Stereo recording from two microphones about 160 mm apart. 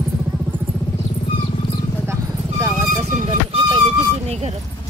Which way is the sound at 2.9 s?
50° right (ahead or behind).